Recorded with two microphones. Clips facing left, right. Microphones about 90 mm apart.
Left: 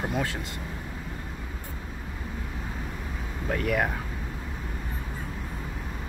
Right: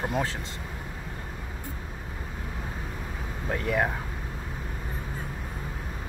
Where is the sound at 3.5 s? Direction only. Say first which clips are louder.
Even; 25° right (ahead or behind).